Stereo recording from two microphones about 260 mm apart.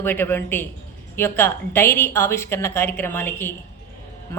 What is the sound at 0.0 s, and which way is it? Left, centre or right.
A man's voice, centre.